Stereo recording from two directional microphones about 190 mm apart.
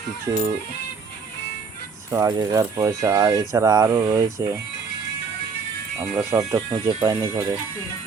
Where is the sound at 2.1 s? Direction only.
15° right (ahead or behind).